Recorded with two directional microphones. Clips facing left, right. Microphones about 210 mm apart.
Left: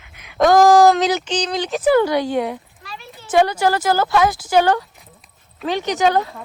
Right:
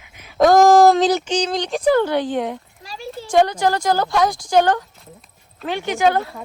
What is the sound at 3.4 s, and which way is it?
A woman's voice, 10° left (ahead or behind).